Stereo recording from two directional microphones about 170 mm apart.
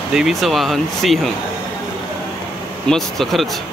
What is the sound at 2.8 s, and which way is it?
Speech, centre (ahead or behind).